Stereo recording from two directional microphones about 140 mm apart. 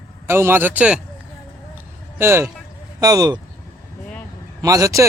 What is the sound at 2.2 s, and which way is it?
A man's voice, 20° right (ahead or behind).